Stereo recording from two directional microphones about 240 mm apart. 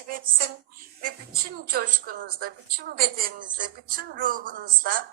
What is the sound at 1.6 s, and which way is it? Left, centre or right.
Speech, right.